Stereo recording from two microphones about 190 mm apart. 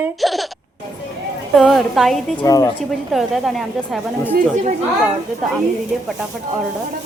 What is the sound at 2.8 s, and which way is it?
A woman's voice, centre (ahead or behind).